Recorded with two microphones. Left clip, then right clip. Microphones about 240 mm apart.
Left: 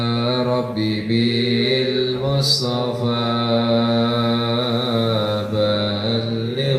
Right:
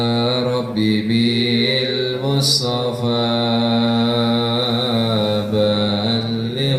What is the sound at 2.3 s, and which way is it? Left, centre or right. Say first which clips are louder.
Mantra: right 4 dB; right.